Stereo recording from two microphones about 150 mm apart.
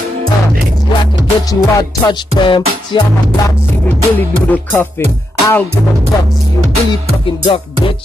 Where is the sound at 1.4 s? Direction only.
25° left (ahead or behind).